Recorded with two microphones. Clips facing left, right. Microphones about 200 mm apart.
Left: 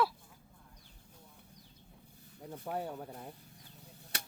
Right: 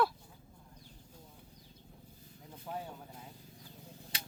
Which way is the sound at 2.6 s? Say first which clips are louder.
Left 4 dB; 60° left (ahead or behind).